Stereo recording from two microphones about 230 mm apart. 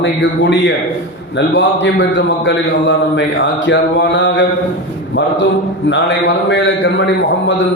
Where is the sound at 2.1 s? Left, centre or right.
Left.